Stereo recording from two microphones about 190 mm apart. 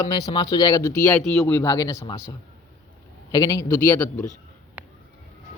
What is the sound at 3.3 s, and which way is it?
Speech, 20° left (ahead or behind).